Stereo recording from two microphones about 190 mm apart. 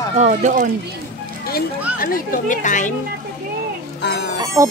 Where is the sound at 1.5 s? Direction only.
50° left (ahead or behind).